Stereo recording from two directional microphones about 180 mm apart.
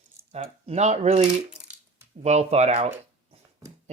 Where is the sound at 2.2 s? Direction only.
35° right (ahead or behind).